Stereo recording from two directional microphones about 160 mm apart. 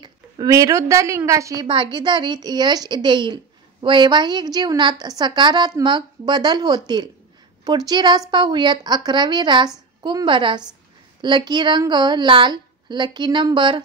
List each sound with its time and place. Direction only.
0.0 s a woman's voice: 25° right (ahead or behind)